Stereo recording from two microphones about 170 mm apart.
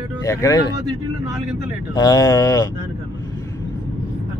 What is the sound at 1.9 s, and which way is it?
Speech, 20° left (ahead or behind).